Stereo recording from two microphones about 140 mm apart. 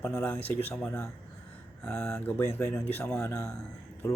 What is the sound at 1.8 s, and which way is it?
Speech, 15° left (ahead or behind).